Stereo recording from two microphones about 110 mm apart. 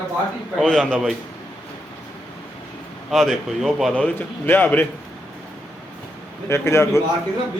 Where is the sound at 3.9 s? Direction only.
15° left (ahead or behind).